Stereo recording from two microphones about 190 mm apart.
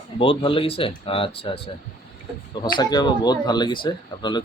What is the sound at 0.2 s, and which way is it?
Speech, 30° left (ahead or behind).